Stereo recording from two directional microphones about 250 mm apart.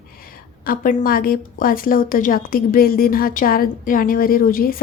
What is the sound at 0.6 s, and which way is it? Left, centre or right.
A woman's voice, left.